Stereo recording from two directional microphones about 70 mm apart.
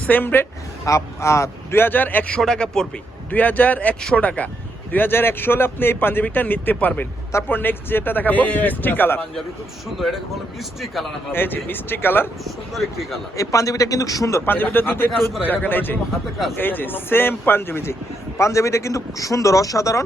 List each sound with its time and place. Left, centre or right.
0.0 s speech: left
0.9 s a man's voice: left
1.8 s speech: left
2.4 s speech: centre
3.2 s speech: left
10.6 s speech: centre
11.3 s speech: left
12.5 s speech: centre
13.3 s a man's voice: left
14.4 s speech: left
18.3 s a man's voice: left